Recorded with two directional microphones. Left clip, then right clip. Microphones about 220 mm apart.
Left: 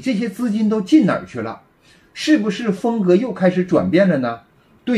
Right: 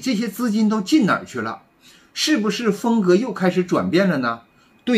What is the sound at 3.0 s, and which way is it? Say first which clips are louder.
Speech: left 4 dB; 5° left (ahead or behind).